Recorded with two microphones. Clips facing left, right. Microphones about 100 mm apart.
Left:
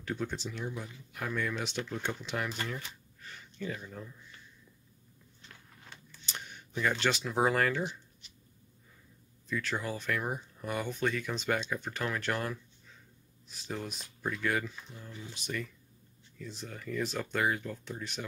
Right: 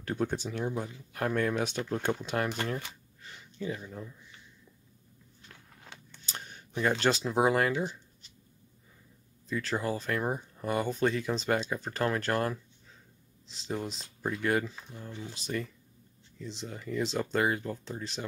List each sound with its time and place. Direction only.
0.0 s speech: 45° right (ahead or behind)
3.2 s a sound: 20° right (ahead or behind)
6.8 s speech: 35° right (ahead or behind)
7.3 s speech: 20° right (ahead or behind)
9.5 s speech: 35° right (ahead or behind)
13.5 s speech: 25° right (ahead or behind)
16.3 s speech: 20° right (ahead or behind)